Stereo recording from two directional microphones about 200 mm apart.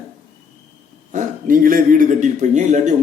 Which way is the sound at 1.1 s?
40° right (ahead or behind).